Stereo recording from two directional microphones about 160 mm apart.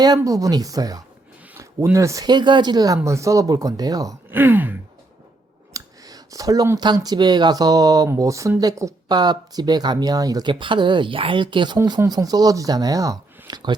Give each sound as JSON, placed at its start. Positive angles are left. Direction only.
{"t": 0.2, "sound": "speech", "side_deg": -20}
{"t": 5.7, "sound": "speech", "side_deg": -20}